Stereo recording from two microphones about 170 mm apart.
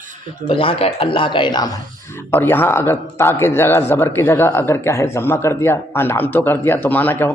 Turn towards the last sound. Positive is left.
turn(degrees=10)  # may be behind; listen again after turning